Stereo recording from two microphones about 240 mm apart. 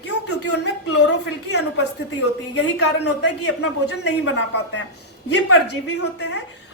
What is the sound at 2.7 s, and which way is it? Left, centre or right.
Speech, left.